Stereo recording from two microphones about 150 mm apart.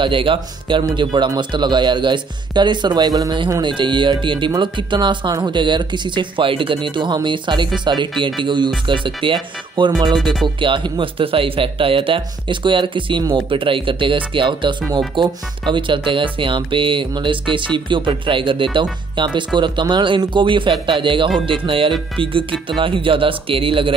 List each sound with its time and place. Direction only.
0.0 s speech: 35° right (ahead or behind)